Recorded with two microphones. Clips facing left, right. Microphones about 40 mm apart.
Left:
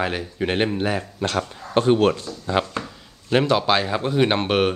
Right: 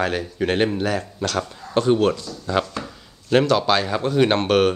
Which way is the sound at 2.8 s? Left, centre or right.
Centre.